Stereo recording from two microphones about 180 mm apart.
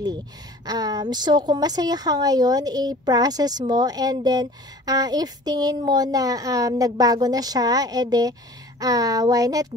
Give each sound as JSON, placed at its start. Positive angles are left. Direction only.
{"t": 0.7, "sound": "a woman's voice", "side_deg": -20}